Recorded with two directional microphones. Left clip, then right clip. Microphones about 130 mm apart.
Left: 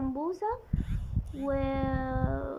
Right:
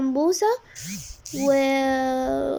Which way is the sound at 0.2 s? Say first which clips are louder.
Right 14 dB; 25° right (ahead or behind).